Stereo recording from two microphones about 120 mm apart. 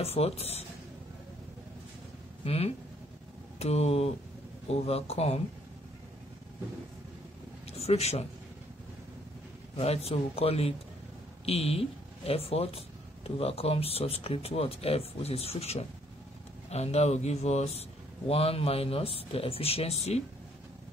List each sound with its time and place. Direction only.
0.0 s speech: 55° left (ahead or behind)
2.4 s speech: 55° left (ahead or behind)
7.6 s speech: 60° left (ahead or behind)
9.8 s speech: 55° left (ahead or behind)